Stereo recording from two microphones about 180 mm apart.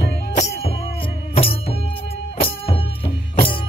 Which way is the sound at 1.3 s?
35° left (ahead or behind).